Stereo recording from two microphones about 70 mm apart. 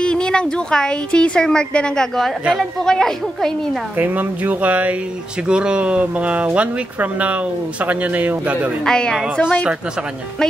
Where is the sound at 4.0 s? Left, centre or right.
Right.